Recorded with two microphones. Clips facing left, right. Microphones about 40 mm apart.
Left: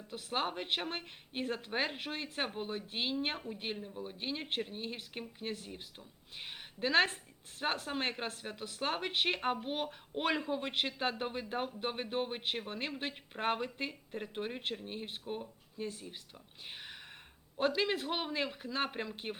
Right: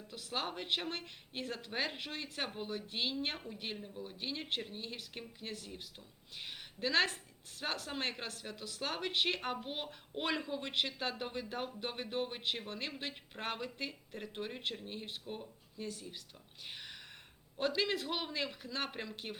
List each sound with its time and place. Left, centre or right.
0.1 s speech: left
7.9 s speech: centre
8.2 s speech: left
14.3 s speech: centre
14.8 s speech: left
16.7 s a sound: left
17.7 s speech: left